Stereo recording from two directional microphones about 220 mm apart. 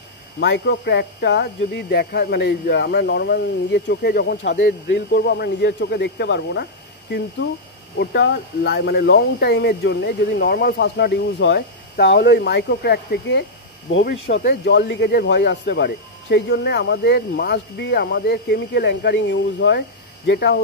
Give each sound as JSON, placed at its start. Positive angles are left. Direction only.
{"t": 0.4, "sound": "speech", "side_deg": 50}